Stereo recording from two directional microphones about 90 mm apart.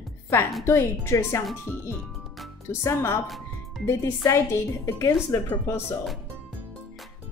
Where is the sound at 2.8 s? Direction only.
30° left (ahead or behind).